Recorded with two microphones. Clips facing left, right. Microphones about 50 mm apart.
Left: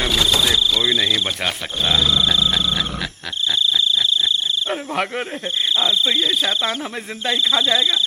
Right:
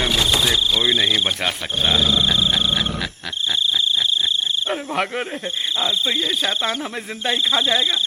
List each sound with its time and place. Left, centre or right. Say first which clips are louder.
0.9 s speech: right 1 dB; centre
4.7 s cricket: right 1 dB; centre
7.7 s speech: left 1 dB; centre